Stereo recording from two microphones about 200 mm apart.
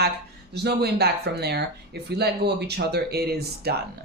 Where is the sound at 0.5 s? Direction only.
55° right (ahead or behind).